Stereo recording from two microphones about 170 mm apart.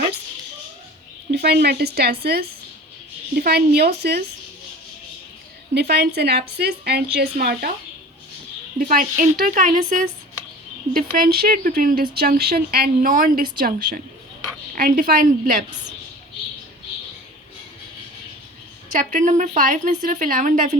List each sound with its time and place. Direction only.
1.3 s a woman's voice: 75° right (ahead or behind)
5.7 s a woman's voice: 75° right (ahead or behind)
8.8 s speech: 55° right (ahead or behind)
10.9 s speech: 60° right (ahead or behind)
18.9 s speech: 50° right (ahead or behind)